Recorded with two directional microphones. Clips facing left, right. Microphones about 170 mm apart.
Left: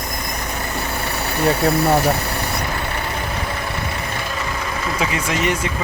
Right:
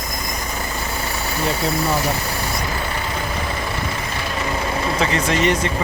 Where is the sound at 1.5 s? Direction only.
60° left (ahead or behind).